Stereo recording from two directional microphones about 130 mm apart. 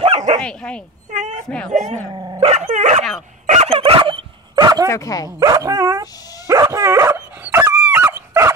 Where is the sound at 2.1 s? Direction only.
30° right (ahead or behind).